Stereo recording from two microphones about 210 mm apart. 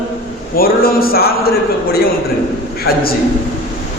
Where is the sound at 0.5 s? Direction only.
45° left (ahead or behind).